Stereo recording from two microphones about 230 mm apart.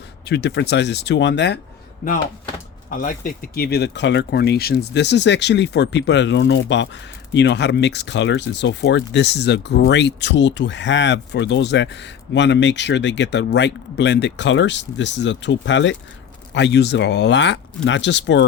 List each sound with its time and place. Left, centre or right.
0.3 s speech: left
2.9 s speech: left